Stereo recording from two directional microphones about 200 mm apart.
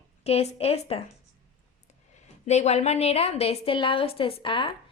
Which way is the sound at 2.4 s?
35° left (ahead or behind).